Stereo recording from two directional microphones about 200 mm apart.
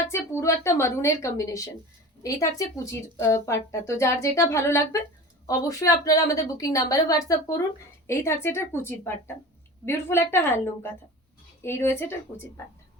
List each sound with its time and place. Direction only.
0.1 s speech: 15° left (ahead or behind)